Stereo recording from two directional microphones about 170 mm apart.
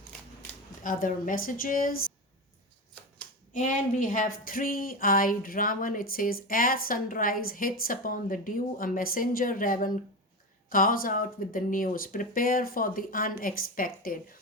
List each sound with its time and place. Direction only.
0.8 s speech: 50° left (ahead or behind)
3.5 s speech: 50° left (ahead or behind)